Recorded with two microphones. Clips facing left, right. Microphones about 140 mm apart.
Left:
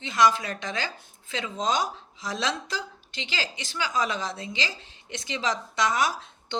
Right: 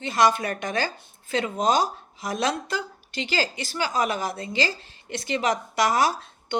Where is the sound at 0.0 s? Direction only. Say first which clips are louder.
Right 2 dB; 60° right (ahead or behind).